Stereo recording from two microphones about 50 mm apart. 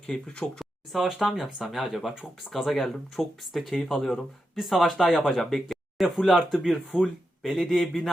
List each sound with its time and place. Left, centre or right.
0.0 s speech: centre
0.6 s a sound: centre
1.5 s speech: centre